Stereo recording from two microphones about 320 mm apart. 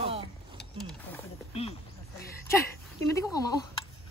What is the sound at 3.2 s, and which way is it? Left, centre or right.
Speech, centre.